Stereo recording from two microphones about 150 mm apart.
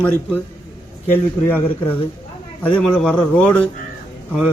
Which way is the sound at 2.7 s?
10° left (ahead or behind).